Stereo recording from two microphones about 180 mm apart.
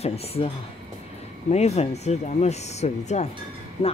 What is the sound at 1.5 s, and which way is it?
Speech, 35° left (ahead or behind).